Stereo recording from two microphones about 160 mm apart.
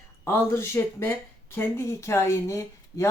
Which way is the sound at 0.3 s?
15° left (ahead or behind).